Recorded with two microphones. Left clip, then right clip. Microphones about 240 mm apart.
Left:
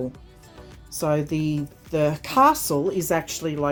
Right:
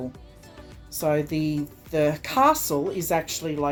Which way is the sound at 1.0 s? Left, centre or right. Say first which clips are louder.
Even; left.